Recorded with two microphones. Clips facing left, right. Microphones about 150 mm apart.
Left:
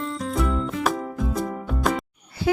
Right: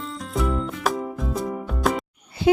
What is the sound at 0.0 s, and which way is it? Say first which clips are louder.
Music: left 1 dB; centre (ahead or behind).